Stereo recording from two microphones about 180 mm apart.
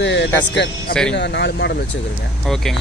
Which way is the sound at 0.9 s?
5° left (ahead or behind).